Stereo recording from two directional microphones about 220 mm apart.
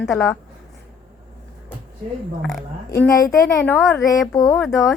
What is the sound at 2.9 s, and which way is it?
A woman's voice, 15° left (ahead or behind).